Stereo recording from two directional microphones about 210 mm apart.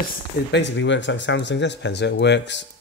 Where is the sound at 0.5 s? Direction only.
60° left (ahead or behind).